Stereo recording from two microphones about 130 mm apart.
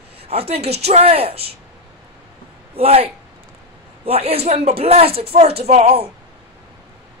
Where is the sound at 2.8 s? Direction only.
50° right (ahead or behind).